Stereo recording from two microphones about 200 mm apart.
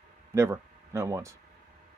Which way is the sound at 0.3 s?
15° right (ahead or behind).